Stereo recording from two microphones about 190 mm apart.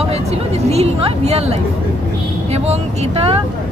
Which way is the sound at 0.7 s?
35° right (ahead or behind).